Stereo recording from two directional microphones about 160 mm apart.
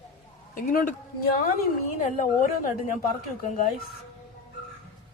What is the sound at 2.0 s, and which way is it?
A woman's voice, 55° left (ahead or behind).